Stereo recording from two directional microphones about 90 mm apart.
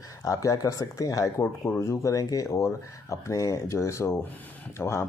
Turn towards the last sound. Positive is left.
turn(degrees=30)  # may be behind; listen again after turning